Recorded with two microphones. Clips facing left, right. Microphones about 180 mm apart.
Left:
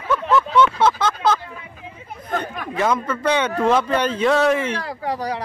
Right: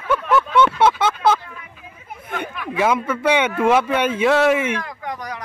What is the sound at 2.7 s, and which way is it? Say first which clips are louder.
A man's voice: right 2 dB; 10° right (ahead or behind).